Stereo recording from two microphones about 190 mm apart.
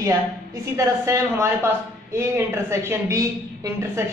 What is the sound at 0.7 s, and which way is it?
A woman's voice, 15° right (ahead or behind).